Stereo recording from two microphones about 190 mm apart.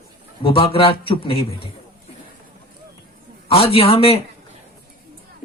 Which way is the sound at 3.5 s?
30° left (ahead or behind).